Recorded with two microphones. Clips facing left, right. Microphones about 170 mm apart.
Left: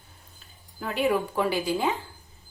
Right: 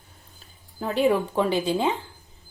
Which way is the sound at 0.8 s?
30° right (ahead or behind).